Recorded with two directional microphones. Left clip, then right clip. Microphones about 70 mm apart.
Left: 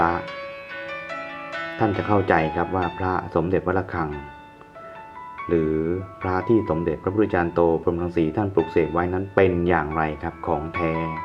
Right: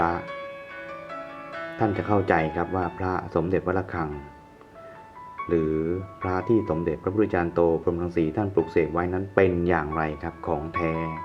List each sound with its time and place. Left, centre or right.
0.2 s music: left
1.9 s speech: centre
5.5 s speech: centre